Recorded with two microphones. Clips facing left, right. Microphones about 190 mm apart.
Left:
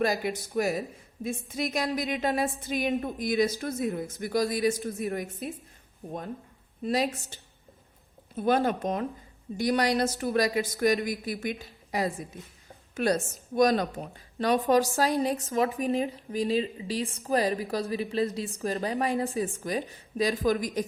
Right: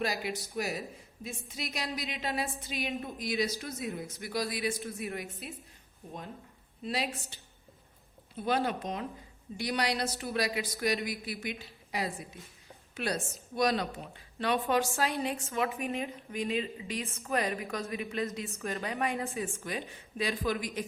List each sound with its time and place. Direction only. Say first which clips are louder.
0.0 s a woman's voice: left 6 dB; 50° left (ahead or behind)
6.8 s a woman's voice: left 7 dB; 45° left (ahead or behind)
8.4 s a woman's voice: left 6 dB; 45° left (ahead or behind)